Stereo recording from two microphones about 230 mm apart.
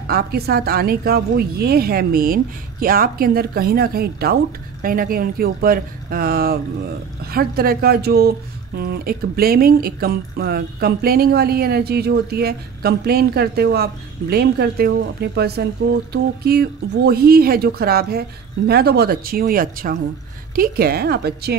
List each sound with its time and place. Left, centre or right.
0.0 s a woman's voice: right